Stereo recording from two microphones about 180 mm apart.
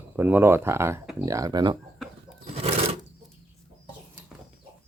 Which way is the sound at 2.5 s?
35° right (ahead or behind).